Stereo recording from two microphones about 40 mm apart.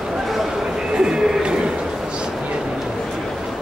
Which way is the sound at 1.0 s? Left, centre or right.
Right.